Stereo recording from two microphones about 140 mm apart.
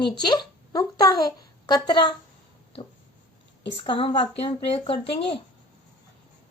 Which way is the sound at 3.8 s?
35° left (ahead or behind).